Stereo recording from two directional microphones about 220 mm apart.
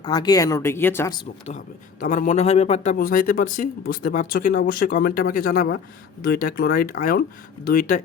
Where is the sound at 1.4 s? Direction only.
35° left (ahead or behind).